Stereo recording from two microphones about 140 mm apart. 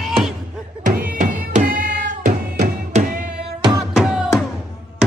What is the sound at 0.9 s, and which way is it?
Music, 80° right.